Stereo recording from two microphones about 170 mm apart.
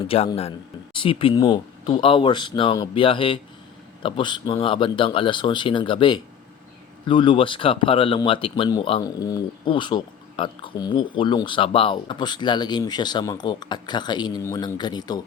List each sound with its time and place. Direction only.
0.0 s speech: 35° left (ahead or behind)